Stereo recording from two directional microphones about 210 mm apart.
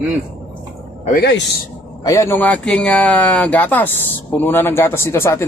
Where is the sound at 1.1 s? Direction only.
55° left (ahead or behind).